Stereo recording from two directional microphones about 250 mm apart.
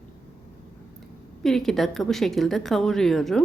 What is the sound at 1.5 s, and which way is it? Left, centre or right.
A woman's voice, centre.